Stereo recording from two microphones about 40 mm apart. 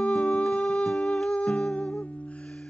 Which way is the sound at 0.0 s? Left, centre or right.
Left.